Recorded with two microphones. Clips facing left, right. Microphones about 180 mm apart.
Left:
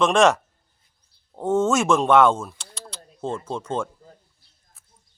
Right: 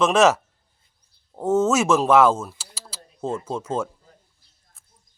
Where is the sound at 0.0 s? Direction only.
5° right (ahead or behind).